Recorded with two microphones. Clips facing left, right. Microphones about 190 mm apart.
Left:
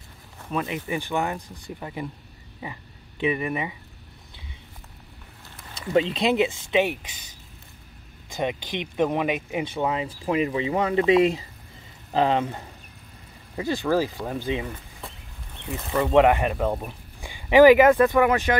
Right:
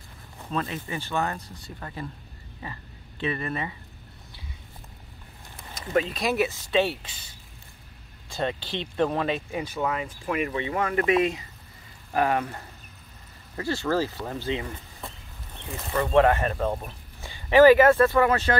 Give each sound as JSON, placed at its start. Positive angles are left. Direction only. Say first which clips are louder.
{"t": 0.5, "sound": "speech", "louder": "left 3 dB", "side_deg": 15}
{"t": 5.9, "sound": "speech", "louder": "left 3 dB", "side_deg": 25}
{"t": 8.3, "sound": "speech", "louder": "left 1 dB", "side_deg": 15}